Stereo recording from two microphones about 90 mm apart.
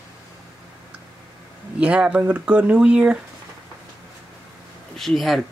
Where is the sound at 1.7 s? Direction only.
15° right (ahead or behind).